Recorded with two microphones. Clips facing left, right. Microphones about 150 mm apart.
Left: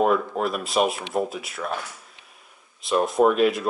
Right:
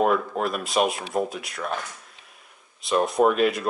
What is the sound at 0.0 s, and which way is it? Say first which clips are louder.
Speech: left 1 dB; centre (ahead or behind).